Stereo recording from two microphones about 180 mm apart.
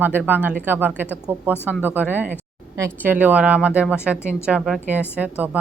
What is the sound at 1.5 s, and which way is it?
Speech, 10° left (ahead or behind).